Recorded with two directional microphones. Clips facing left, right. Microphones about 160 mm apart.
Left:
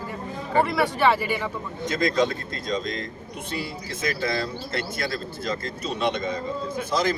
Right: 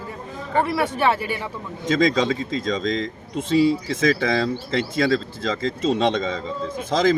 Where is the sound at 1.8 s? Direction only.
90° right.